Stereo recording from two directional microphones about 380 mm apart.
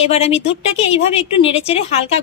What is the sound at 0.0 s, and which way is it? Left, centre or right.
Speech, centre.